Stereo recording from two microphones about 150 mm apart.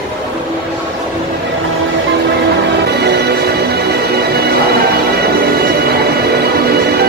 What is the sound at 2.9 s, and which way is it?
Music, 90° right.